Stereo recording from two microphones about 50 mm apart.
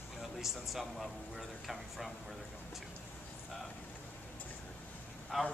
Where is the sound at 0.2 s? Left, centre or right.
Centre.